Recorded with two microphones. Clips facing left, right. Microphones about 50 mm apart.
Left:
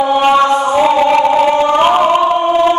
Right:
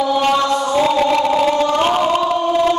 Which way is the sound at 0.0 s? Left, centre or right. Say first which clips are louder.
Left 5 dB; left.